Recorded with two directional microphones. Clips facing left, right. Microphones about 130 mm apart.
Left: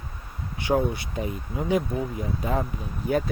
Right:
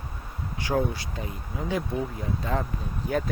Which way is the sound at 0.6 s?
20° left (ahead or behind).